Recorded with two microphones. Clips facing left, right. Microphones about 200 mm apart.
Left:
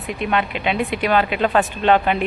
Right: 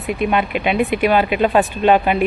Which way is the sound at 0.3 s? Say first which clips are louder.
Right 1 dB; 10° right (ahead or behind).